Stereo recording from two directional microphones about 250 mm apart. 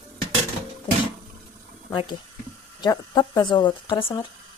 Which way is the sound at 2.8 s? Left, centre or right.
Centre.